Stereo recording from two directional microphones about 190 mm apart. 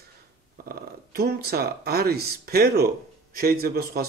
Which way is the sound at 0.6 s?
50° right (ahead or behind).